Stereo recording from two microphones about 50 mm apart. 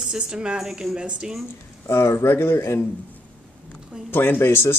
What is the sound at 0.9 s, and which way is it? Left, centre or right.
Speech, centre.